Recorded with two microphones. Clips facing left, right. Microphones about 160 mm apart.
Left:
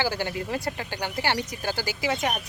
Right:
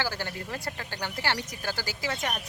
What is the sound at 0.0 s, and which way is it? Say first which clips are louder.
Speech: left 5 dB; 15° left (ahead or behind).